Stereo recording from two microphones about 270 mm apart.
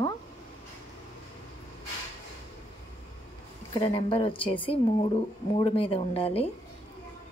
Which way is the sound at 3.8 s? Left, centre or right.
Centre.